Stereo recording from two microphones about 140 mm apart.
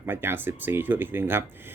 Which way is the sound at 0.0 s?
15° right (ahead or behind).